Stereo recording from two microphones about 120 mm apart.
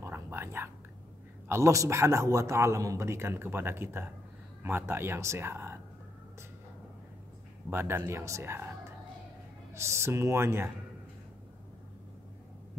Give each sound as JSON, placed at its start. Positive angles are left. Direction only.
{"t": 0.0, "sound": "whispering", "side_deg": -20}
{"t": 1.5, "sound": "a man's voice", "side_deg": -25}
{"t": 7.7, "sound": "a man's voice", "side_deg": -20}
{"t": 9.8, "sound": "a man's voice", "side_deg": -25}